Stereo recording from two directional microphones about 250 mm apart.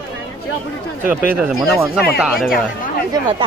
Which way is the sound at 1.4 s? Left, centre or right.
Centre.